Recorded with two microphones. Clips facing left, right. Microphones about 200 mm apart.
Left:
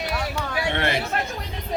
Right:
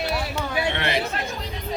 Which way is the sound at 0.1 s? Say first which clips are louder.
Right 1 dB; 25° right (ahead or behind).